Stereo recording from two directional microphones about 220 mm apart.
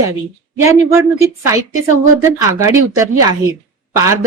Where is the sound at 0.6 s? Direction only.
15° right (ahead or behind).